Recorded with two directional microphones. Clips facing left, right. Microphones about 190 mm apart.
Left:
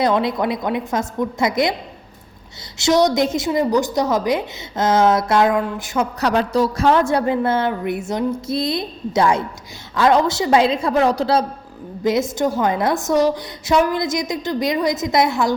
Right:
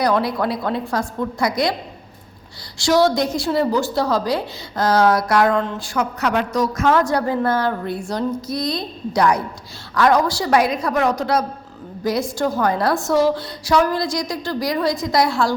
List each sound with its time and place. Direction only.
0.0 s a woman's voice: 20° left (ahead or behind)
2.7 s a woman's voice: 20° left (ahead or behind)
6.1 s a woman's voice: 35° left (ahead or behind)